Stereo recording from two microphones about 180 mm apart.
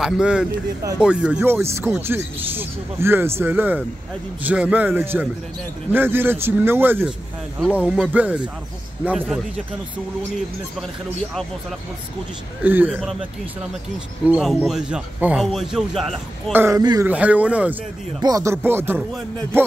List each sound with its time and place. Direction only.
0.0 s speech: 5° right (ahead or behind)
12.6 s speech: 10° right (ahead or behind)
14.2 s speech: 5° right (ahead or behind)
16.5 s speech: 15° right (ahead or behind)
17.1 s speech: 10° right (ahead or behind)